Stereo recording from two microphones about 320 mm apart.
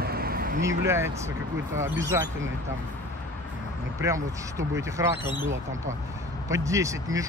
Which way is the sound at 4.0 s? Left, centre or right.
Centre.